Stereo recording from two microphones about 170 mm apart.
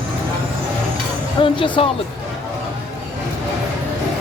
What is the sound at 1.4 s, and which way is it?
Speech, 30° left (ahead or behind).